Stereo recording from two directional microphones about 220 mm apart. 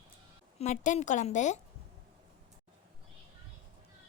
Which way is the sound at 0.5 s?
30° left (ahead or behind).